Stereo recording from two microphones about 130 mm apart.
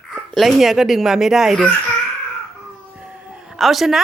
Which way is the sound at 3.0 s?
5° right (ahead or behind).